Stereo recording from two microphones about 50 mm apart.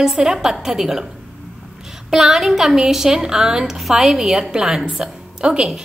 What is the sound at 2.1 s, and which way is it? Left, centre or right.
A woman's voice, centre.